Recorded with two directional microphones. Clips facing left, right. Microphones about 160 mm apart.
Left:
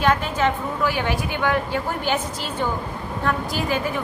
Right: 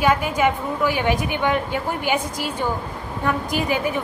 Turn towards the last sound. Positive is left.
turn(degrees=-15)  # may be behind; listen again after turning